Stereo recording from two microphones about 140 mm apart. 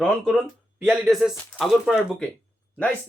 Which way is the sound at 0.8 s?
5° right (ahead or behind).